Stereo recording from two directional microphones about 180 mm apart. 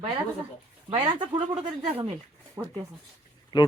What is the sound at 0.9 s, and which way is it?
Speech, 30° right (ahead or behind).